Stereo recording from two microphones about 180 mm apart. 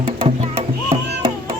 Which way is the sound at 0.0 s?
35° right (ahead or behind).